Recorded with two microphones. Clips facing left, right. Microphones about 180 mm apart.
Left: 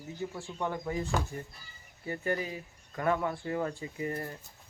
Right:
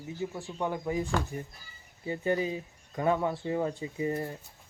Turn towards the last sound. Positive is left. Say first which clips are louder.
# right 4 dB
turn(degrees=-20)  # may be behind; listen again after turning